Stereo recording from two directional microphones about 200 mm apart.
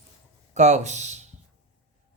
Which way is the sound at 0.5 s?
35° right (ahead or behind).